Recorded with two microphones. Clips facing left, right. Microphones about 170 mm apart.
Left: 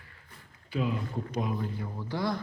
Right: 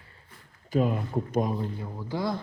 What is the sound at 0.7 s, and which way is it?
Speech, 45° right (ahead or behind).